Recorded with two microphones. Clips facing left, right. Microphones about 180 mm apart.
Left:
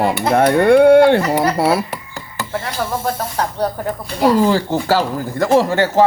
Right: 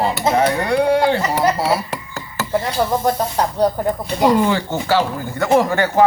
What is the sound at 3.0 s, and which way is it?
Speech, 15° right (ahead or behind).